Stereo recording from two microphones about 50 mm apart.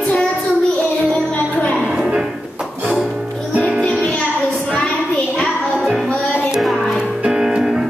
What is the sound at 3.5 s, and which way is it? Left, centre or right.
Music, right.